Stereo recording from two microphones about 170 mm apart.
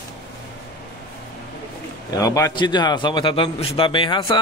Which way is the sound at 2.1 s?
20° left (ahead or behind).